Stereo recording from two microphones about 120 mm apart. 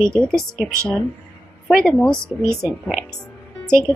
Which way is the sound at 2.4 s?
20° right (ahead or behind).